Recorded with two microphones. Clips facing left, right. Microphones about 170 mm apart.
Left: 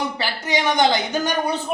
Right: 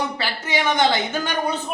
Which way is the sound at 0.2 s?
15° left (ahead or behind).